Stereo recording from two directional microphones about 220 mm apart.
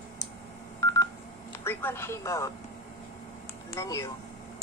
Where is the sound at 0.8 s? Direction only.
15° left (ahead or behind).